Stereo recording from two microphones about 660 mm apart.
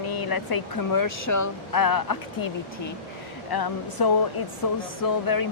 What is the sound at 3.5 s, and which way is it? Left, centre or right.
Speech, left.